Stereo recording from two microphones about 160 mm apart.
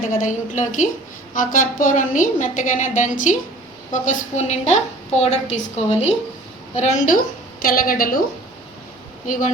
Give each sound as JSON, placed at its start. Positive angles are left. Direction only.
{"t": 0.1, "sound": "a woman's voice", "side_deg": 50}
{"t": 9.2, "sound": "a woman's voice", "side_deg": 55}